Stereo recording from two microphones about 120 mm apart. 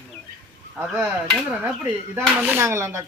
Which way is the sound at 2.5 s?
20° right (ahead or behind).